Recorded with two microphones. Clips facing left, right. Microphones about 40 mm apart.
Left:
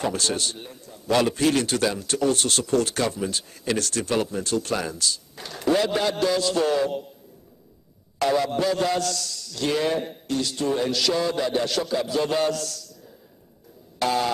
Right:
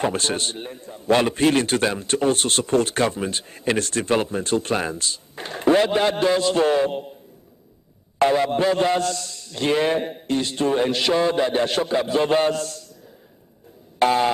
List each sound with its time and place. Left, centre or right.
0.0 s a man's voice: right
8.2 s a man's voice: right
13.9 s a sound: right